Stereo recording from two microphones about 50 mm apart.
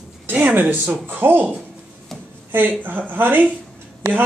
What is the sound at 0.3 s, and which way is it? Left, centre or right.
A man's voice, right.